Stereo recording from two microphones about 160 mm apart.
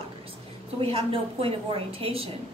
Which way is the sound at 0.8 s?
35° right (ahead or behind).